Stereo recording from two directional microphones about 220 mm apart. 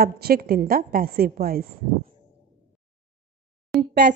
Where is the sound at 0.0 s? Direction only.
45° right (ahead or behind).